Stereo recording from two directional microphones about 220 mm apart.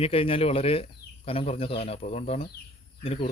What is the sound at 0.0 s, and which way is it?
Speech, 25° left (ahead or behind).